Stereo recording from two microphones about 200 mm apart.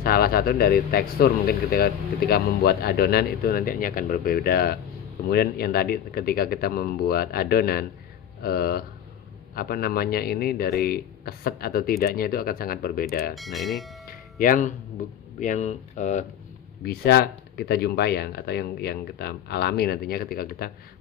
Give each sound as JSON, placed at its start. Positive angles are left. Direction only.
{"t": 0.0, "sound": "speech", "side_deg": 50}
{"t": 13.3, "sound": "speech", "side_deg": 0}
{"t": 14.0, "sound": "music", "side_deg": 45}
{"t": 15.0, "sound": "speech", "side_deg": 40}
{"t": 16.8, "sound": "speech", "side_deg": 55}